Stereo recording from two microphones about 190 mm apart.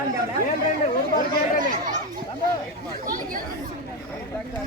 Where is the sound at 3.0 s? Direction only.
45° right (ahead or behind).